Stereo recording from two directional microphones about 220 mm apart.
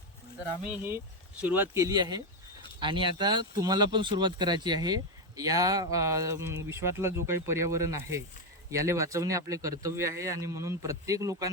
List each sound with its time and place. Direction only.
0.6 s speech: 10° right (ahead or behind)